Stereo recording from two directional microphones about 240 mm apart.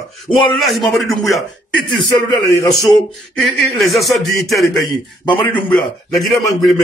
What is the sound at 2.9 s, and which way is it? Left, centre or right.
Speech, centre.